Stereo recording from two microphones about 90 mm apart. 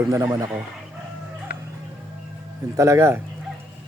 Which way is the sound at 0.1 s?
35° right (ahead or behind).